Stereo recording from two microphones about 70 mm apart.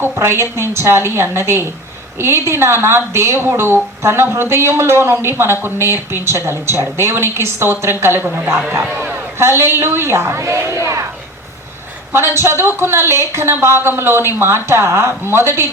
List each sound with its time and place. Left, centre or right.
0.0 s a woman's voice: right
9.4 s speech: right
12.1 s speech: right